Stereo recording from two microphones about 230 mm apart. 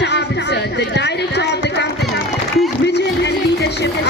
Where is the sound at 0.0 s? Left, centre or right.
Left.